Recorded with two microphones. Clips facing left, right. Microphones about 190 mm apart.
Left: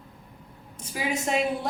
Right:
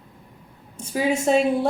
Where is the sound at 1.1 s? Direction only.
30° right (ahead or behind).